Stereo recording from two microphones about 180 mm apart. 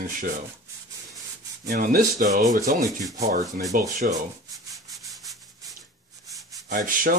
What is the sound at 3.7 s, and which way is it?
Speech, 40° right (ahead or behind).